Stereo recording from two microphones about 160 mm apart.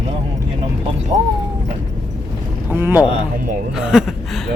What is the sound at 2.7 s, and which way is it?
Speech, 15° right (ahead or behind).